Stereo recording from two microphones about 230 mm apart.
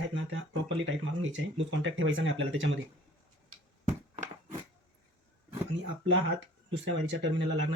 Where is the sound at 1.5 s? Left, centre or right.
Right.